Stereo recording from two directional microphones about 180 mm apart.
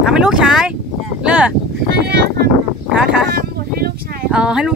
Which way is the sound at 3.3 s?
55° right (ahead or behind).